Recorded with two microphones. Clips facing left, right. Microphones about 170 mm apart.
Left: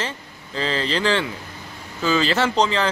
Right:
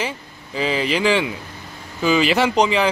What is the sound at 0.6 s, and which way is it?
A man's voice, 10° right (ahead or behind).